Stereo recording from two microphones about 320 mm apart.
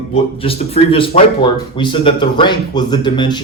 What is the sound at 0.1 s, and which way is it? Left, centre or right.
A man's voice, centre.